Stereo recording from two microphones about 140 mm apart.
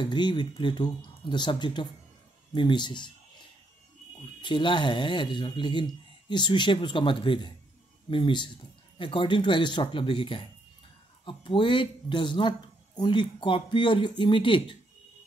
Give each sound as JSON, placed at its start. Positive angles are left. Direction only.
{"t": 0.0, "sound": "speech", "side_deg": 35}
{"t": 4.4, "sound": "speech", "side_deg": 35}